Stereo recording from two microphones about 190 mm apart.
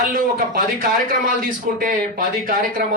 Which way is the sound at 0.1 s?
45° right (ahead or behind).